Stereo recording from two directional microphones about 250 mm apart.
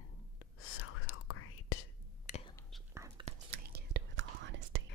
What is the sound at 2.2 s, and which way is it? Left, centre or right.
Whispering, left.